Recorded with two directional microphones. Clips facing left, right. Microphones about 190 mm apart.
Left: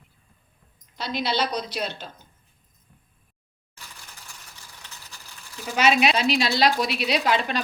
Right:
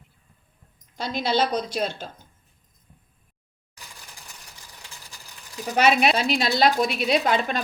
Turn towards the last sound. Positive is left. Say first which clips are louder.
# right 1 dB
turn(degrees=-45)  # may be behind; listen again after turning